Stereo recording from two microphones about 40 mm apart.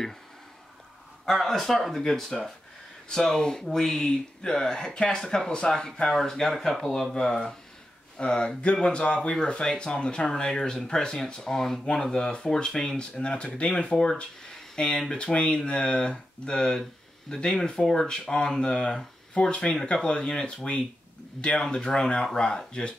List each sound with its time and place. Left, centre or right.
1.2 s speech: centre
7.2 s speech: left
12.9 s speech: left